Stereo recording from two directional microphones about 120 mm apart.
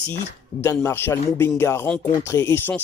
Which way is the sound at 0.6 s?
20° left (ahead or behind).